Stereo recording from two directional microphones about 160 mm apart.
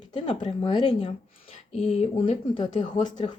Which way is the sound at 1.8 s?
40° left (ahead or behind).